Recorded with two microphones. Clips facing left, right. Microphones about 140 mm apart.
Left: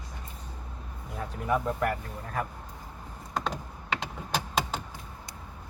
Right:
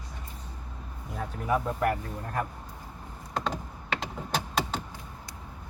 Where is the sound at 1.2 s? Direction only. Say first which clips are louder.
Even; centre (ahead or behind).